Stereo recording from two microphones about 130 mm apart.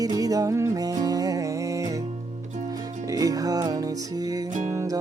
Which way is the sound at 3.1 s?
25° right (ahead or behind).